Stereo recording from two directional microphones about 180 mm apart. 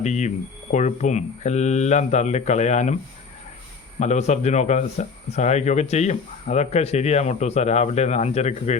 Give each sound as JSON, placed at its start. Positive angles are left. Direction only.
{"t": 0.0, "sound": "speech", "side_deg": 40}
{"t": 4.0, "sound": "speech", "side_deg": 40}